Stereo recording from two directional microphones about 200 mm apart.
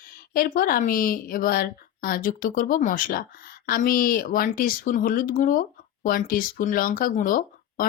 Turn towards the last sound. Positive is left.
turn(degrees=45)  # may be behind; listen again after turning